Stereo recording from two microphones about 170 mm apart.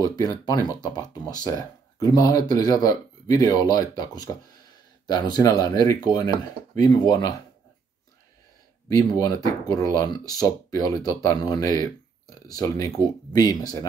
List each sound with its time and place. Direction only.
0.0 s speech: 20° left (ahead or behind)
9.2 s speech: 20° left (ahead or behind)